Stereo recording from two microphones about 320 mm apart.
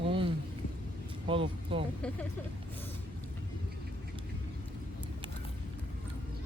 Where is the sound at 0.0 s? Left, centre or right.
Centre.